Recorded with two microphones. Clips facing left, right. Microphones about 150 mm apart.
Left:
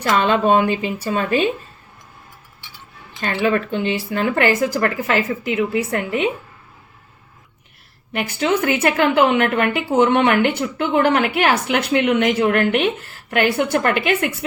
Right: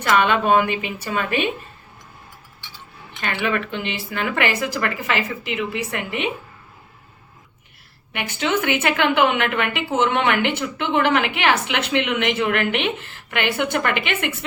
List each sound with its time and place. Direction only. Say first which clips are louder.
0.0 s a woman's voice: left 2 dB; 30° left (ahead or behind)
3.1 s a woman's voice: left 5 dB; 35° left (ahead or behind)
8.1 s a woman's voice: left 3 dB; 40° left (ahead or behind)